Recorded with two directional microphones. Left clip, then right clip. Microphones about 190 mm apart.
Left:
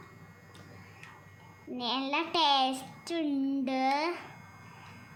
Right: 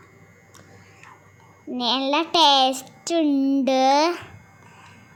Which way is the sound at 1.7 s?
40° right (ahead or behind).